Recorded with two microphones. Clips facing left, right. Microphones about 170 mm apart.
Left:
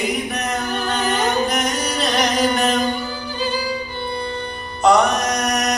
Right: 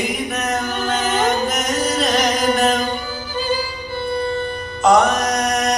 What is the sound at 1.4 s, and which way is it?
Music, 40° right (ahead or behind).